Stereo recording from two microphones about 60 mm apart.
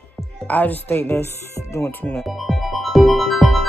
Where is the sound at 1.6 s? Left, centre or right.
Left.